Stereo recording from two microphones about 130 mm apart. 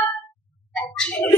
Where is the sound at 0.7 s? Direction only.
10° left (ahead or behind).